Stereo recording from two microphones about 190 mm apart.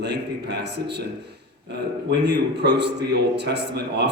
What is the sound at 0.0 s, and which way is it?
A man's voice, 60° right (ahead or behind).